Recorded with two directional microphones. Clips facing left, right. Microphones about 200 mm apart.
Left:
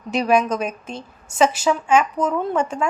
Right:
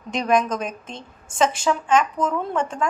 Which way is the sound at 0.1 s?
5° left (ahead or behind).